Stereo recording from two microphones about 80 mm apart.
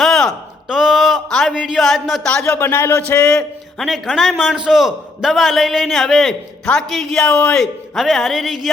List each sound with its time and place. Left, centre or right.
0.0 s a sound: centre
1.5 s a man's voice: centre
2.6 s speech: left
3.2 s a man's voice: centre
3.8 s a man's voice: centre